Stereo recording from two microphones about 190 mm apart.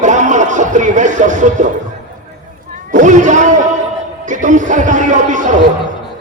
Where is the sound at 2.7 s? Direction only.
40° right (ahead or behind).